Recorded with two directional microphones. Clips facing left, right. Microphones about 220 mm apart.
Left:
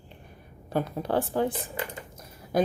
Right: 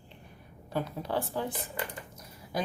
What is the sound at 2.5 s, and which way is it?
Speech, 50° left (ahead or behind).